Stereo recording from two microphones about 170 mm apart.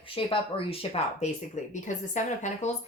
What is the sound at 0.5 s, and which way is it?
A woman's voice, 35° left (ahead or behind).